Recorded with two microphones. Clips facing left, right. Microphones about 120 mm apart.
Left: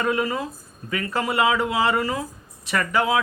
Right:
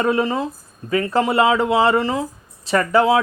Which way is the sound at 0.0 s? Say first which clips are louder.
Right 5 dB; 30° right (ahead or behind).